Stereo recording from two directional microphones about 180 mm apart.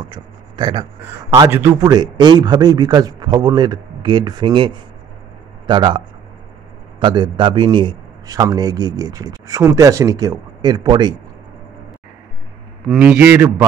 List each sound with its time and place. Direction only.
0.1 s a man's voice: 25° right (ahead or behind)
12.8 s a man's voice: centre (ahead or behind)